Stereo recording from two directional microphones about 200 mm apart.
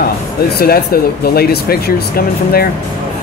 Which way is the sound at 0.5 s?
50° left (ahead or behind).